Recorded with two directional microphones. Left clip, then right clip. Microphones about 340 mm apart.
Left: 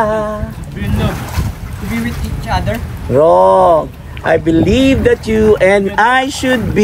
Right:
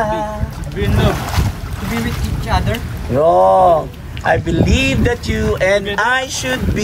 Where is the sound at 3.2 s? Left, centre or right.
Left.